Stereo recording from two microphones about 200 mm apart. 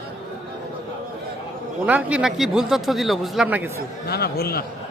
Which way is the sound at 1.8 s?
5° right (ahead or behind).